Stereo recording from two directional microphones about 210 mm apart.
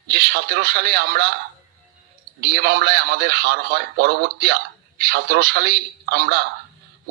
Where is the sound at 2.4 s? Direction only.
50° right (ahead or behind).